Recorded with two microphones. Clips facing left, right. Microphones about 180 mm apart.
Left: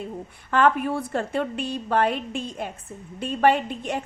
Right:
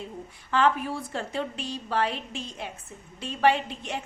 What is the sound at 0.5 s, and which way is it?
A woman's voice, 55° left (ahead or behind).